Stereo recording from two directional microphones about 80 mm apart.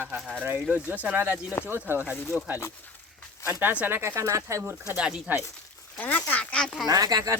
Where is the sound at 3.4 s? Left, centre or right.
Right.